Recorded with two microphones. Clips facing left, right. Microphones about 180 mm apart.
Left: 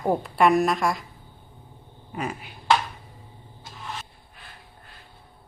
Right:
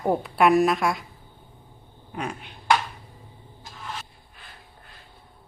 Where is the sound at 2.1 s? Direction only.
5° left (ahead or behind).